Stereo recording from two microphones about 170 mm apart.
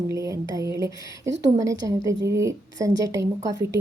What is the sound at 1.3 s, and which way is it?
Speech, 90° right.